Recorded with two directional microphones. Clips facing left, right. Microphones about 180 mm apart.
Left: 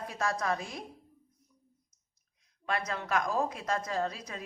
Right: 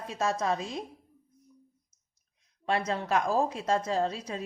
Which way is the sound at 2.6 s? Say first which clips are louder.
Right 5 dB; 30° right (ahead or behind).